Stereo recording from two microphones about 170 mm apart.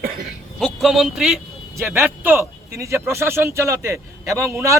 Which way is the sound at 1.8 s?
15° right (ahead or behind).